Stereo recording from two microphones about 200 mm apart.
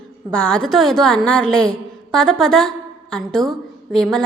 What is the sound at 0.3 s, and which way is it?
A woman's voice, 5° left (ahead or behind).